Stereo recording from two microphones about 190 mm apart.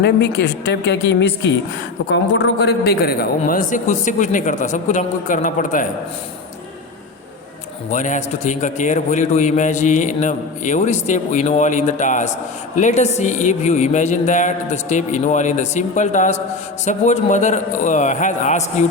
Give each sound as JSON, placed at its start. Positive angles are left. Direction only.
{"t": 0.0, "sound": "a woman's voice", "side_deg": 65}
{"t": 2.0, "sound": "a man's voice", "side_deg": 85}
{"t": 7.9, "sound": "a man's voice", "side_deg": 40}